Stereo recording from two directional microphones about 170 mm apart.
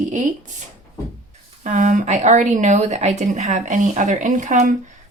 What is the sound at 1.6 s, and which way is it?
Speech, 50° right (ahead or behind).